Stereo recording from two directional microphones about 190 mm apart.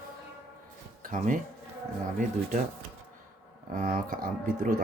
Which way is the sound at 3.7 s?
45° right (ahead or behind).